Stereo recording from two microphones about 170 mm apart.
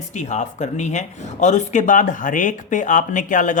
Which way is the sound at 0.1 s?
45° left (ahead or behind).